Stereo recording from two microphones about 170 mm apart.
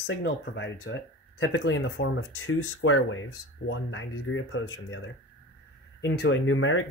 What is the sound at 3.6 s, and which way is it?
Speech, 90° left.